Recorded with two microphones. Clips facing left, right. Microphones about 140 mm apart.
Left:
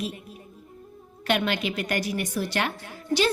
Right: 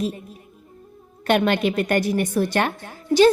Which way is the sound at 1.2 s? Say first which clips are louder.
Right 6 dB; 50° right (ahead or behind).